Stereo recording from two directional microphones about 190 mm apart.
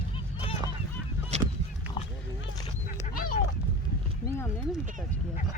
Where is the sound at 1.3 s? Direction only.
35° right (ahead or behind).